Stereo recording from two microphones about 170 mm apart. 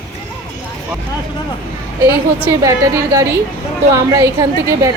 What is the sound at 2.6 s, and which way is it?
A woman's voice, 20° right (ahead or behind).